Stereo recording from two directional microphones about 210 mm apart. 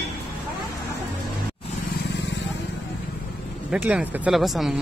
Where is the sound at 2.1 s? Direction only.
60° left (ahead or behind).